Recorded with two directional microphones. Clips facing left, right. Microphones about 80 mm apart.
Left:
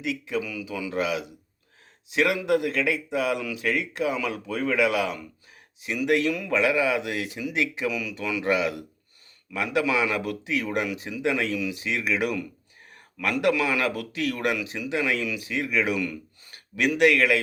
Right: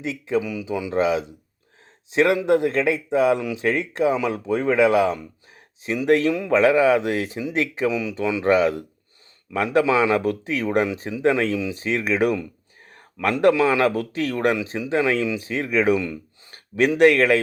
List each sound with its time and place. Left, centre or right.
0.0 s speech: right